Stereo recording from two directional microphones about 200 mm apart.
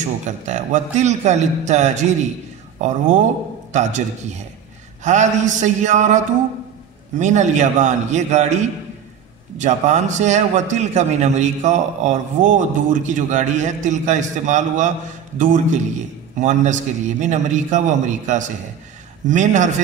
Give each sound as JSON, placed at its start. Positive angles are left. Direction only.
{"t": 0.5, "sound": "a man's voice", "side_deg": -35}